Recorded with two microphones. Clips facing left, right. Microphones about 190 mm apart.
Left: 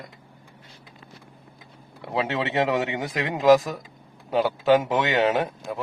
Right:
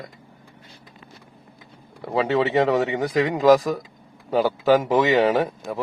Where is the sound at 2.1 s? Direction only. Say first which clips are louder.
Right 6 dB; centre (ahead or behind).